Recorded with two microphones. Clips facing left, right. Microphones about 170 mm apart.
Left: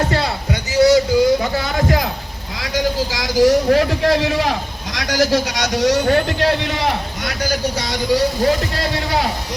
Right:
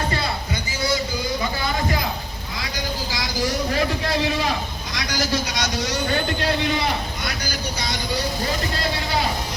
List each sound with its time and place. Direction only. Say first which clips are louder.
0.7 s a sound: left 13 dB; 85° left
2.6 s vehicle: left 10 dB; 80° left
4.9 s a man's voice: left 8 dB; 70° left (ahead or behind)